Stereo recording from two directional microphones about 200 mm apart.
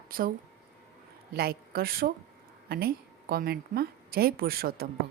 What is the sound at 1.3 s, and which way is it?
A woman's voice, 50° right (ahead or behind).